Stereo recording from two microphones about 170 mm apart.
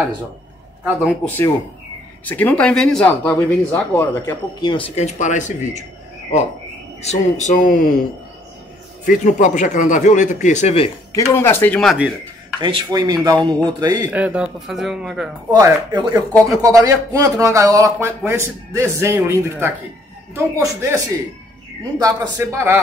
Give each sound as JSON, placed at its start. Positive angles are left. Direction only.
{"t": 1.2, "sound": "speech", "side_deg": 10}
{"t": 4.6, "sound": "speech", "side_deg": 25}
{"t": 4.9, "sound": "speech", "side_deg": 45}
{"t": 7.0, "sound": "speech", "side_deg": 40}
{"t": 9.0, "sound": "speech", "side_deg": 50}
{"t": 11.1, "sound": "speech", "side_deg": 15}
{"t": 12.5, "sound": "speech", "side_deg": -25}
{"t": 14.1, "sound": "speech", "side_deg": -10}
{"t": 15.5, "sound": "a man's voice", "side_deg": -25}